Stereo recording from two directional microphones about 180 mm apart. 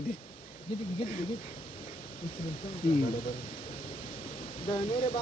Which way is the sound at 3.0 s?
55° left (ahead or behind).